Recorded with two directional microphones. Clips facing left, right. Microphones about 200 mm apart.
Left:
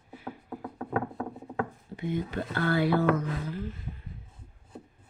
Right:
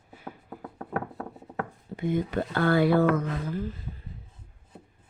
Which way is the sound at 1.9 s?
50° right (ahead or behind).